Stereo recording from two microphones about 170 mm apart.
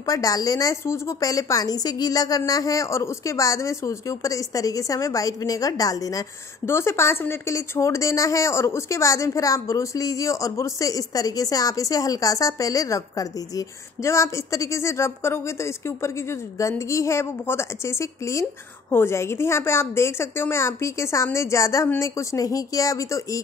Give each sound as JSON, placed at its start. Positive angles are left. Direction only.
{"t": 0.0, "sound": "a woman's voice", "side_deg": 20}